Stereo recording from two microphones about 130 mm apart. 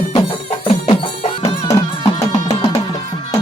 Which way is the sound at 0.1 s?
40° left (ahead or behind).